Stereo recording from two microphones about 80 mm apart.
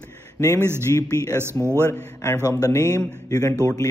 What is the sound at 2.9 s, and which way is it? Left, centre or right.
Speech, left.